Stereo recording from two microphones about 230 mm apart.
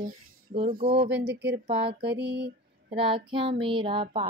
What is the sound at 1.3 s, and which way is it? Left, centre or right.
Speech, right.